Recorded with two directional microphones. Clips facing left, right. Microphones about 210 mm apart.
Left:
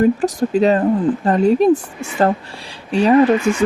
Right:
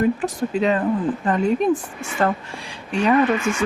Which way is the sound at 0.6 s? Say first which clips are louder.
Left 5 dB; 35° left (ahead or behind).